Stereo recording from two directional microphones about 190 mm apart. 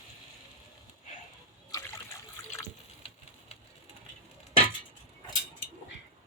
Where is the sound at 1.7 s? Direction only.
20° left (ahead or behind).